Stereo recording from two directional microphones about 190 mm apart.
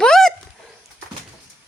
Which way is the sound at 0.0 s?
5° left (ahead or behind).